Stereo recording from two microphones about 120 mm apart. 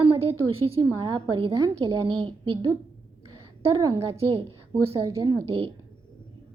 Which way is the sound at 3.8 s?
30° right (ahead or behind).